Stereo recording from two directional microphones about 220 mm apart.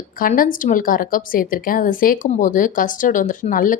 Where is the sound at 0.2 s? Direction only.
40° left (ahead or behind).